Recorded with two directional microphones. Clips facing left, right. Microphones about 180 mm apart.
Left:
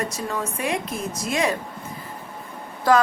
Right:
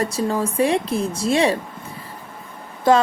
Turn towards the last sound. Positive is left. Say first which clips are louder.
# right 2 dB
turn(degrees=-25)  # may be behind; listen again after turning